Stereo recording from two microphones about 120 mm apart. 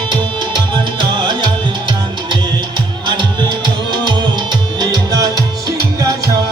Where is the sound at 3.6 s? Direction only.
40° right (ahead or behind).